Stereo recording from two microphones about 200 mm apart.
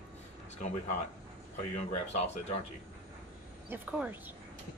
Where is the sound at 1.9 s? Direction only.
30° left (ahead or behind).